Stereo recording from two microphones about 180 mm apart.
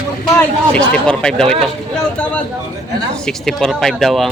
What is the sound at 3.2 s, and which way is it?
Speech, 5° left (ahead or behind).